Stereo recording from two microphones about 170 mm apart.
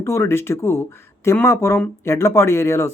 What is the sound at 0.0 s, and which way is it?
Speech, 15° left (ahead or behind).